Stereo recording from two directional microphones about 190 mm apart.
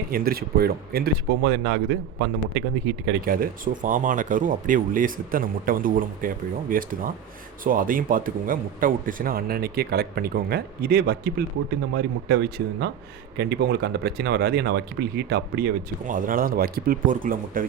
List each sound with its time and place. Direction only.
0.1 s speech: 50° right (ahead or behind)